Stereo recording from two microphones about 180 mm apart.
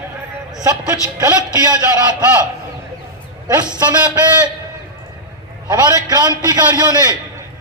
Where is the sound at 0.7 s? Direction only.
20° right (ahead or behind).